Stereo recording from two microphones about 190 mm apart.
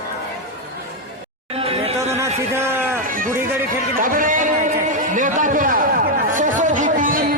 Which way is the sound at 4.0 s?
45° right (ahead or behind).